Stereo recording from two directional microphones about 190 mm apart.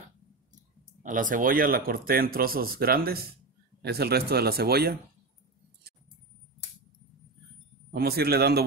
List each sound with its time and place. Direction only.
1.0 s speech: 45° right (ahead or behind)
7.9 s speech: 55° right (ahead or behind)